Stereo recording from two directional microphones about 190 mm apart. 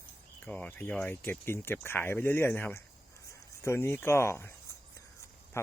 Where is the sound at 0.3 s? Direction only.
5° left (ahead or behind).